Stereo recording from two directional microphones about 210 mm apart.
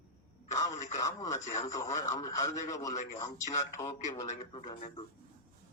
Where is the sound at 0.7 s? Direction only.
35° left (ahead or behind).